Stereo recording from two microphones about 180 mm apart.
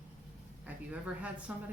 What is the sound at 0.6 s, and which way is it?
Speech, 5° right (ahead or behind).